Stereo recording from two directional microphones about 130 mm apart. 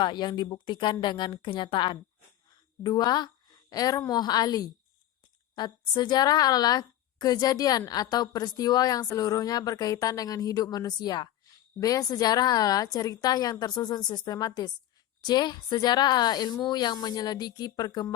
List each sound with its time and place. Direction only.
0.0 s a woman's voice: 35° left (ahead or behind)